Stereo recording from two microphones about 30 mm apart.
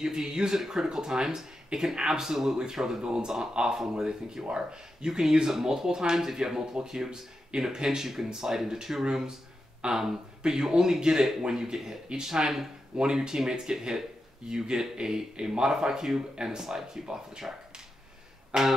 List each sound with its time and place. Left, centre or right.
0.0 s speech: centre; by 3.7 s right
4.0 s speech: centre
10.4 s speech: centre
12.9 s speech: right
17.4 s a sound: centre
18.5 s speech: right